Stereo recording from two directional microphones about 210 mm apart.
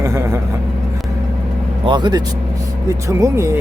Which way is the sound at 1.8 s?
20° right (ahead or behind).